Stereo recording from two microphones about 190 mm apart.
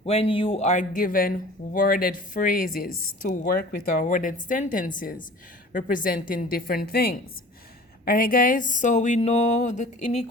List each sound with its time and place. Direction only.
0.0 s speech: 30° left (ahead or behind)